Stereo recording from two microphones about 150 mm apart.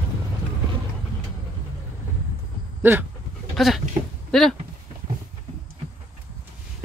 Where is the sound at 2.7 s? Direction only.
15° right (ahead or behind).